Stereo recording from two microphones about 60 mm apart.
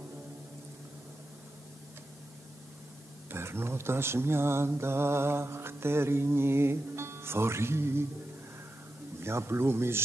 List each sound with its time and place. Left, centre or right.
3.3 s mantra: right
9.2 s mantra: right